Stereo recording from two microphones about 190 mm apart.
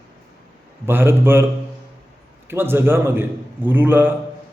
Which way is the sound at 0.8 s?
10° right (ahead or behind).